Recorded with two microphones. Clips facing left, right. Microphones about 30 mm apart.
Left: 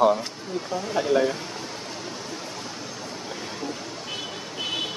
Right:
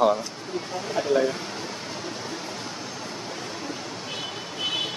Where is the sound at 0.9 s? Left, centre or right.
Centre.